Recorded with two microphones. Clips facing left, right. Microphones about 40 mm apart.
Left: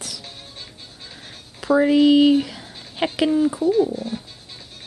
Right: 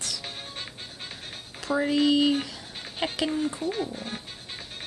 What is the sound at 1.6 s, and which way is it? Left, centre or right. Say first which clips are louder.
Speech: left 8 dB; centre.